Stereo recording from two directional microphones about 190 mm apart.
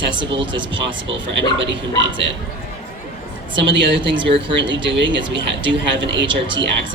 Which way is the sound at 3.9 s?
75° right (ahead or behind).